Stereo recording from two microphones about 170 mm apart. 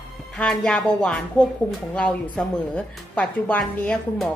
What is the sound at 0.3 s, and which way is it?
Speech, 5° left (ahead or behind).